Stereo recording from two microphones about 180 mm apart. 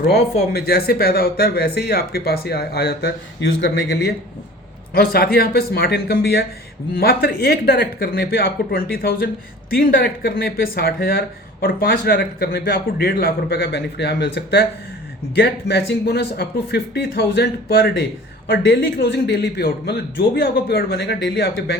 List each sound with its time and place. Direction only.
0.5 s speech: 60° left (ahead or behind)